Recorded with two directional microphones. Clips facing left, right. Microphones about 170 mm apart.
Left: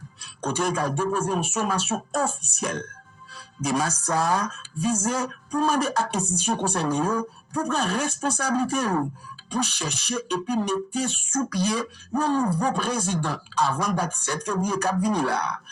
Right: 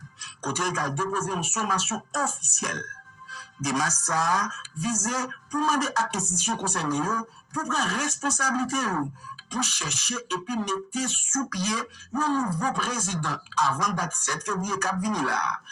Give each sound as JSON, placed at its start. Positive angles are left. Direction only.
{"t": 0.2, "sound": "a man's voice", "side_deg": 30}